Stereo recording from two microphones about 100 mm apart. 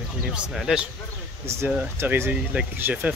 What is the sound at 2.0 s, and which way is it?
Speech, 20° right (ahead or behind).